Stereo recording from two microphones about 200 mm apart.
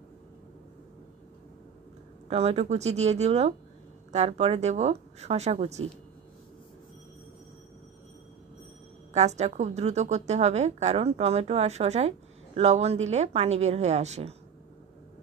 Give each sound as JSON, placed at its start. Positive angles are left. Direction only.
{"t": 2.2, "sound": "a woman's voice", "side_deg": -30}
{"t": 9.1, "sound": "a woman's voice", "side_deg": -35}